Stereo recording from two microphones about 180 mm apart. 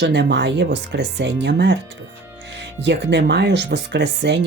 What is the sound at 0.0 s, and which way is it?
Speech, 75° right (ahead or behind).